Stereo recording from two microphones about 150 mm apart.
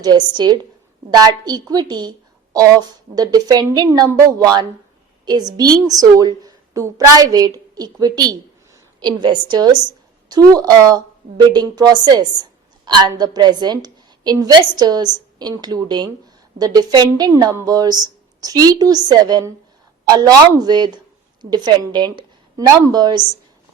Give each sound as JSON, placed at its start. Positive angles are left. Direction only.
{"t": 0.0, "sound": "a woman's voice", "side_deg": -30}